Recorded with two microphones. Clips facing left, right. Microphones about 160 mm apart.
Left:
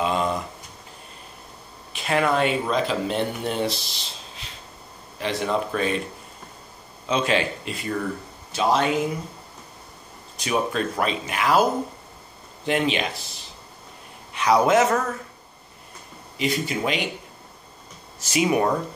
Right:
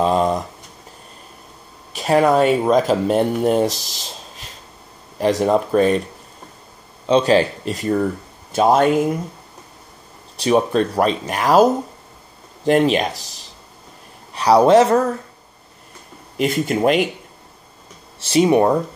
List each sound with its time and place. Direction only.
0.0 s a sound: 35° right (ahead or behind)
1.9 s speech: 40° right (ahead or behind)
7.1 s speech: 35° right (ahead or behind)
10.3 s speech: 35° right (ahead or behind)
12.6 s a man's voice: 40° right (ahead or behind)
16.3 s speech: 50° right (ahead or behind)
18.2 s speech: 30° right (ahead or behind)